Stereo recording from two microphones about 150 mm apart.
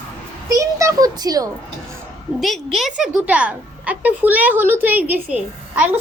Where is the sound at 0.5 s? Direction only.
20° right (ahead or behind).